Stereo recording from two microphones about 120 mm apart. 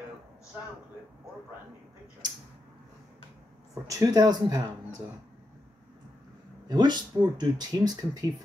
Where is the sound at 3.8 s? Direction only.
30° right (ahead or behind).